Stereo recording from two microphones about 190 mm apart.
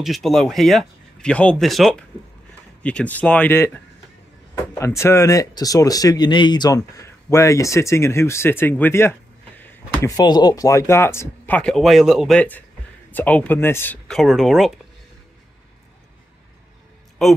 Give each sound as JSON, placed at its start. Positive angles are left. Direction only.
{"t": 0.0, "sound": "speech", "side_deg": 0}
{"t": 4.7, "sound": "speech", "side_deg": 15}
{"t": 17.2, "sound": "speech", "side_deg": 0}